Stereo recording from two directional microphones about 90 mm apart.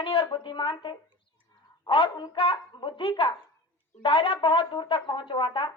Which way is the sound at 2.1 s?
45° left (ahead or behind).